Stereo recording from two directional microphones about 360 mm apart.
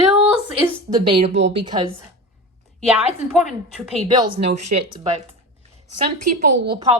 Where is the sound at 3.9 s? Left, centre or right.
Centre.